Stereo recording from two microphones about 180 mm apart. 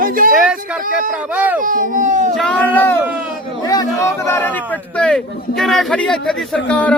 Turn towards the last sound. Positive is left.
turn(degrees=5)  # may be behind; listen again after turning